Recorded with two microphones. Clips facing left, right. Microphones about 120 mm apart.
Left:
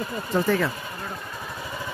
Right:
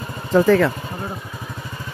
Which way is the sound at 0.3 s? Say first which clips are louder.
Right 9 dB; 90° right.